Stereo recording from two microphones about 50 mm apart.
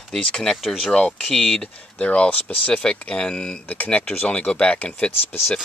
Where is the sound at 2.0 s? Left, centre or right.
Left.